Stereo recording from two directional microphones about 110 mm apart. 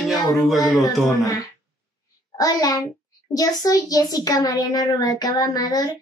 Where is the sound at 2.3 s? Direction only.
35° left (ahead or behind).